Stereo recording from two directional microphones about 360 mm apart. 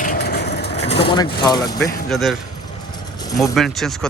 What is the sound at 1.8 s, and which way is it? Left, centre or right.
Speech, centre.